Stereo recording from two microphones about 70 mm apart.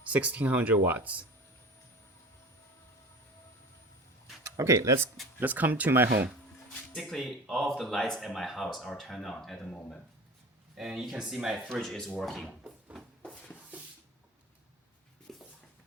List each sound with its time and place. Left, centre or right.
0.1 s speech: right
4.4 s speech: right
5.4 s speech: right
6.9 s speech: centre
10.8 s speech: centre
11.5 s speech: centre
12.6 s a sound: centre
13.2 s rub: centre
15.3 s a sound: centre